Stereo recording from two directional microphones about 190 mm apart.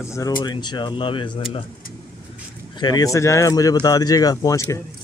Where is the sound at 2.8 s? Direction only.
20° left (ahead or behind).